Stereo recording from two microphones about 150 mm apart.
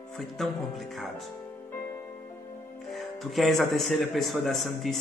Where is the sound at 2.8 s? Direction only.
Centre (ahead or behind).